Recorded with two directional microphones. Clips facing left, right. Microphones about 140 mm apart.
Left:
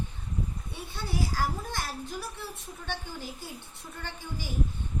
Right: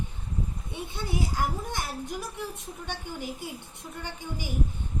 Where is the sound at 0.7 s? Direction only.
20° right (ahead or behind).